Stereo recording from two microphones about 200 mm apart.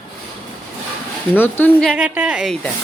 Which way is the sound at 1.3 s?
10° left (ahead or behind).